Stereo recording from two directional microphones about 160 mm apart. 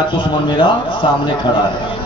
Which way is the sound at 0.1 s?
30° left (ahead or behind).